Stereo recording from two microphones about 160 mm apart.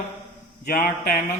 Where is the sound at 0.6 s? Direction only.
55° left (ahead or behind).